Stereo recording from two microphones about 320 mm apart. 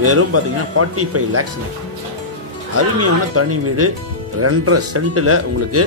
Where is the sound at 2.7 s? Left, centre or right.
Right.